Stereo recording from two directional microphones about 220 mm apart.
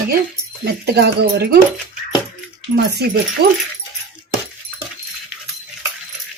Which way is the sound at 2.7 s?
45° right (ahead or behind).